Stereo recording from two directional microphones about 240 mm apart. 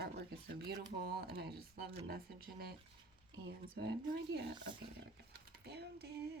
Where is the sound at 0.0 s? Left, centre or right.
Right.